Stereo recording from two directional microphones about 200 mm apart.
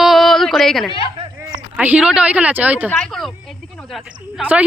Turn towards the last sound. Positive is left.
turn(degrees=-5)  # may be behind; listen again after turning